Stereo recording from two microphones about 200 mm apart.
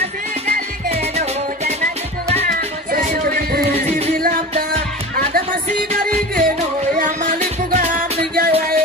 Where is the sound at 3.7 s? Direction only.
30° right (ahead or behind).